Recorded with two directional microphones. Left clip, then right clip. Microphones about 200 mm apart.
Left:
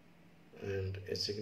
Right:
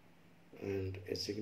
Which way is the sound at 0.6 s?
40° right (ahead or behind).